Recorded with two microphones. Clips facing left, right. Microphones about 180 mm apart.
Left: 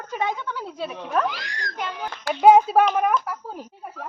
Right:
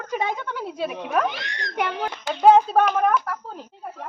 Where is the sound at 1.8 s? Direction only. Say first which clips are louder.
Right 6 dB; 70° right (ahead or behind).